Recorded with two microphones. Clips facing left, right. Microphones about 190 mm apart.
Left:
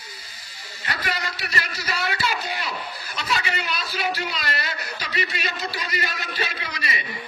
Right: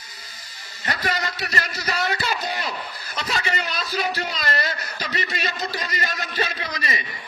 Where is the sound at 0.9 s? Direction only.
45° right (ahead or behind).